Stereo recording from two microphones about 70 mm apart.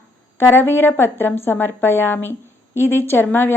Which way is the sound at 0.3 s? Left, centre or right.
Left.